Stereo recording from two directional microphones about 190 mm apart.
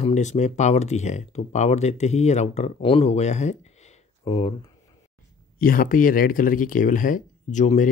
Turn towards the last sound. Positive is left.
turn(degrees=40)  # may be behind; listen again after turning